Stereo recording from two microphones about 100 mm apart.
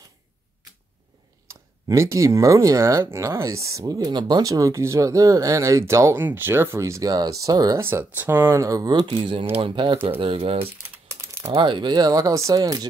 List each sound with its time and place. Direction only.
1.9 s speech: 30° right (ahead or behind)
7.8 s speech: 20° right (ahead or behind); by 9.1 s 40° right (ahead or behind)
9.1 s speech: 60° right (ahead or behind)
10.2 s speech: 70° right (ahead or behind)
11.4 s speech: 55° right (ahead or behind); by 12.8 s 40° right (ahead or behind)